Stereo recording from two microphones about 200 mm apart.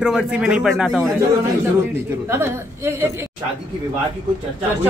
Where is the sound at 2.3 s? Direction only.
15° right (ahead or behind).